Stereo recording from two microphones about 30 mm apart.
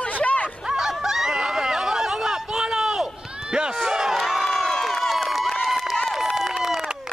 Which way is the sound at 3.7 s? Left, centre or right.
Centre.